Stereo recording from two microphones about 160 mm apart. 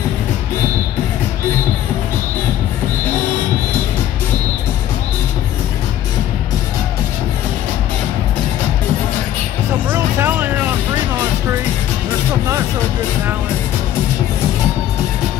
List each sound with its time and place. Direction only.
9.8 s music: 15° right (ahead or behind)